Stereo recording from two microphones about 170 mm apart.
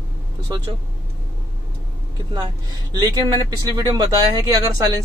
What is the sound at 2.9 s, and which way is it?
Speech, 25° right (ahead or behind).